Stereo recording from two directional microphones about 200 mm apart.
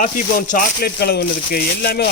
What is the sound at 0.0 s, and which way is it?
Speech, 40° left (ahead or behind).